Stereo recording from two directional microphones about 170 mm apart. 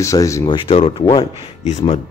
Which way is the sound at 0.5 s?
35° left (ahead or behind).